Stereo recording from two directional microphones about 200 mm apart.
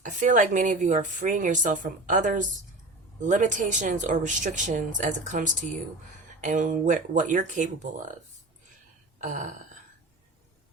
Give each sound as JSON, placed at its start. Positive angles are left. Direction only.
{"t": 0.0, "sound": "a woman's voice", "side_deg": -40}
{"t": 9.2, "sound": "a woman's voice", "side_deg": -40}